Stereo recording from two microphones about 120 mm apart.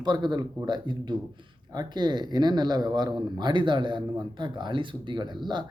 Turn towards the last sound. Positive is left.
turn(degrees=-40)  # may be behind; listen again after turning